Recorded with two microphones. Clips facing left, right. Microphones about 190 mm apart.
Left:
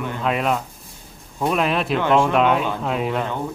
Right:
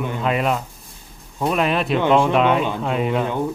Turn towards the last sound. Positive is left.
turn(degrees=0)  # may be behind; listen again after turning